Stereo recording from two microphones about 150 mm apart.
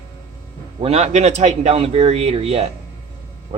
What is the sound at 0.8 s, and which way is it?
A man's voice, 45° right (ahead or behind).